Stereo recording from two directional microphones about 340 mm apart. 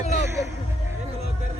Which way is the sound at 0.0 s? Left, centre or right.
Centre.